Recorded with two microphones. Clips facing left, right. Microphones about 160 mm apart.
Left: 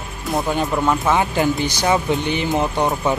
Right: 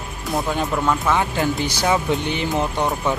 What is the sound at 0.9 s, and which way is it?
Speech, 15° left (ahead or behind).